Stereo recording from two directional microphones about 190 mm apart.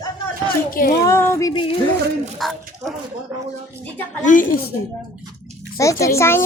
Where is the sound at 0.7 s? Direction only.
45° left (ahead or behind).